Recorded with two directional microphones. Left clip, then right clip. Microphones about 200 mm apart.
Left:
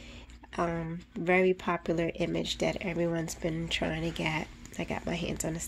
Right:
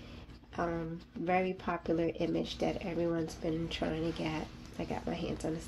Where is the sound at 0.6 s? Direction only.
50° left (ahead or behind).